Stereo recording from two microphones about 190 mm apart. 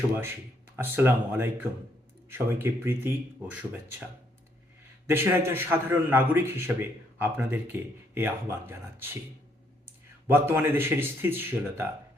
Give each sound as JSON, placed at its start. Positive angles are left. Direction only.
{"t": 0.8, "sound": "a man's voice", "side_deg": -10}
{"t": 5.0, "sound": "a man's voice", "side_deg": -10}
{"t": 10.2, "sound": "a man's voice", "side_deg": -10}